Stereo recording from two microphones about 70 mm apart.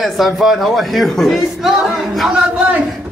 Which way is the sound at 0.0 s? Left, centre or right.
Centre.